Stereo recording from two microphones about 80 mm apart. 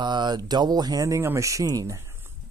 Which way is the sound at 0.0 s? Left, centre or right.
Right.